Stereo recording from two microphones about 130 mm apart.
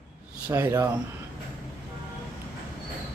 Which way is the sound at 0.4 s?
15° right (ahead or behind).